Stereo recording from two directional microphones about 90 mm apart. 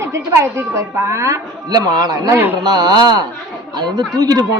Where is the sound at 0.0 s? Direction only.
30° right (ahead or behind).